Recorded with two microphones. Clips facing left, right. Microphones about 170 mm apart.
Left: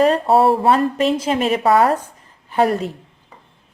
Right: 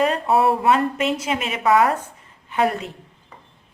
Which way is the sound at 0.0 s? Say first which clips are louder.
Left 4 dB; 35° left (ahead or behind).